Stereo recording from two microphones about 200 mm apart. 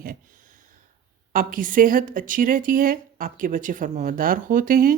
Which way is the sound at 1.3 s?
45° right (ahead or behind).